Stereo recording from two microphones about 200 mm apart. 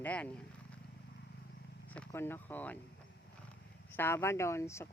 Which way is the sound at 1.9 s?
10° left (ahead or behind).